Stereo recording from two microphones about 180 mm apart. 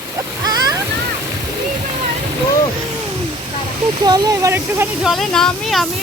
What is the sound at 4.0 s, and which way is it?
Speech, 20° right (ahead or behind).